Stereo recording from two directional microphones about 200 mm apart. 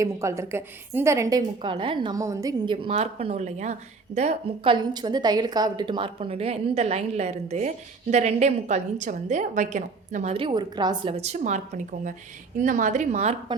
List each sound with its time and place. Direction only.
0.0 s a woman's voice: 15° right (ahead or behind); by 13.3 s 35° right (ahead or behind)